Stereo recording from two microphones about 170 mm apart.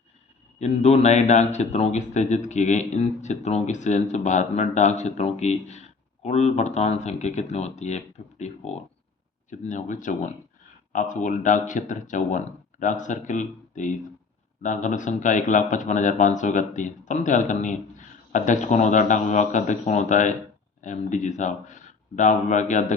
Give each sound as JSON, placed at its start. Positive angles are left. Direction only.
{"t": 0.6, "sound": "speech", "side_deg": 40}